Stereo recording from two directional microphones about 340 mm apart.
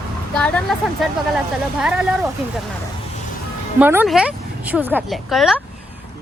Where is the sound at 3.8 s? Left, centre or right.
Centre.